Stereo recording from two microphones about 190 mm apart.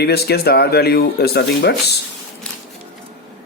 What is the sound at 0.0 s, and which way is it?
Speech, 55° left (ahead or behind).